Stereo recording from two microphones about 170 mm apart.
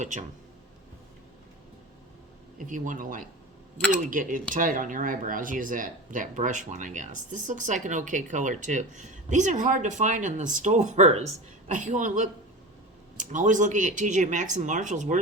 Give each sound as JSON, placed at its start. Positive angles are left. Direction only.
{"t": 0.0, "sound": "speech", "side_deg": -45}
{"t": 2.6, "sound": "speech", "side_deg": -50}